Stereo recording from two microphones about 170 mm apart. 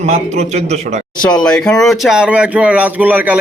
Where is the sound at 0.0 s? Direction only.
40° right (ahead or behind).